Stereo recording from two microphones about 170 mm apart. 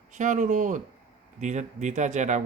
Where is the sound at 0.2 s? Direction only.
50° right (ahead or behind).